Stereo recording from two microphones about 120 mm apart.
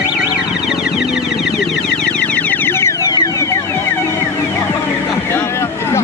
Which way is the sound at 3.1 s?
30° left (ahead or behind).